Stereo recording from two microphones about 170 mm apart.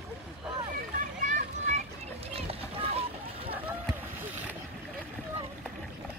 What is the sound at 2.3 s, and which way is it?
Boat, 35° right (ahead or behind).